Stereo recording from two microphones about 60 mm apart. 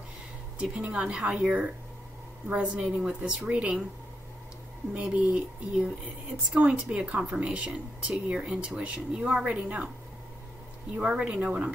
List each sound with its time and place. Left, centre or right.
0.6 s a woman's voice: right
4.9 s a woman's voice: right
11.0 s a woman's voice: centre